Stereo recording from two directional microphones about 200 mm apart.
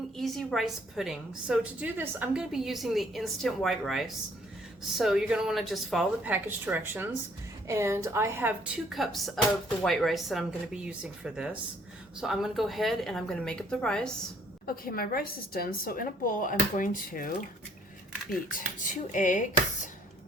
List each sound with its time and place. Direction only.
0.2 s a woman's voice: centre (ahead or behind)
14.7 s a woman's voice: 45° left (ahead or behind)
18.8 s speech: 40° left (ahead or behind)